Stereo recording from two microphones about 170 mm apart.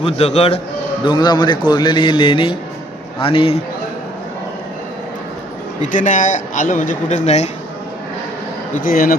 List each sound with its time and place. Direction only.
0.2 s a man's voice: 35° left (ahead or behind)
1.0 s a man's voice: 25° left (ahead or behind)
5.8 s a man's voice: 50° left (ahead or behind)
8.7 s a man's voice: 55° left (ahead or behind)